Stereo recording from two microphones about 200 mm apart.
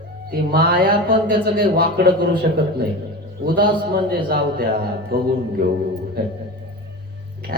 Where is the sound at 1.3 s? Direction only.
50° right (ahead or behind).